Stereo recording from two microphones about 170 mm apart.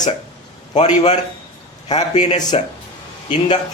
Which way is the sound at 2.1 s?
45° left (ahead or behind).